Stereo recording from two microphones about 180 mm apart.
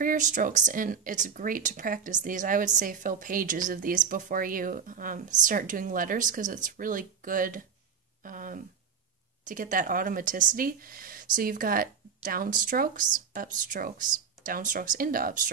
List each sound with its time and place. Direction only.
0.0 s speech: 45° right (ahead or behind)
8.2 s a sound: 50° right (ahead or behind)
9.5 s speech: 45° right (ahead or behind)